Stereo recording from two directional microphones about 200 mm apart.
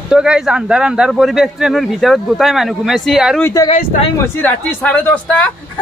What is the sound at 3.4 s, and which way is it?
Speech, 15° left (ahead or behind).